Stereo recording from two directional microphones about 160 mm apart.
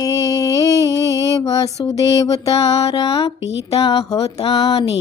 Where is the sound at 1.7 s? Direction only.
40° left (ahead or behind).